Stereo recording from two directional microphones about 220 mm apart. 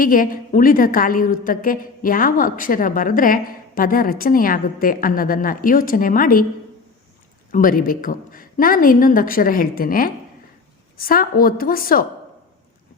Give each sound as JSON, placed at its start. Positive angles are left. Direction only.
{"t": 0.0, "sound": "a woman's voice", "side_deg": 40}
{"t": 7.5, "sound": "a woman's voice", "side_deg": 40}